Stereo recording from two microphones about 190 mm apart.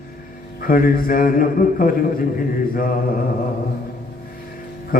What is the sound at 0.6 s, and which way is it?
Mantra, 50° left (ahead or behind).